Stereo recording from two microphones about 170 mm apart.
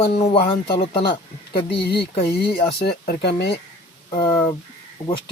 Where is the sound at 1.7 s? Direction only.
70° left (ahead or behind).